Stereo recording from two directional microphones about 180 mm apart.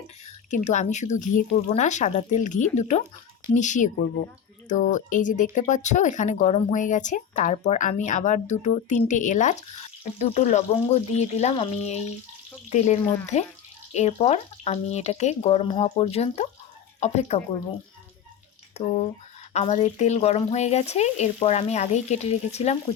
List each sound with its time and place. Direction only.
0.3 s speech: 40° left (ahead or behind)
18.8 s speech: 35° left (ahead or behind)